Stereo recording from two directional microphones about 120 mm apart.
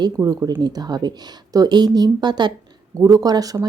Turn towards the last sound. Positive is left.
turn(degrees=-30)  # may be behind; listen again after turning